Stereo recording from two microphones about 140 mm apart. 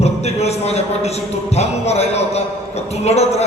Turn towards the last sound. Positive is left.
turn(degrees=50)  # may be behind; listen again after turning